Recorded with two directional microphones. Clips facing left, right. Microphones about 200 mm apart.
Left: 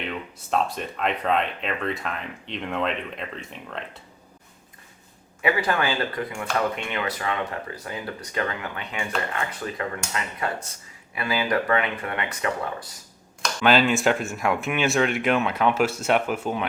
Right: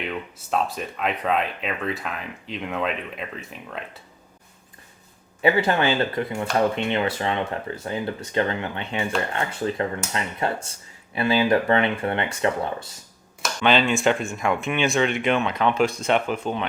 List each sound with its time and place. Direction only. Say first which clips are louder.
0.1 s speech: even; 5° right (ahead or behind)
5.4 s speech: right 4 dB; 25° right (ahead or behind)
13.4 s speech: left 1 dB; 5° left (ahead or behind)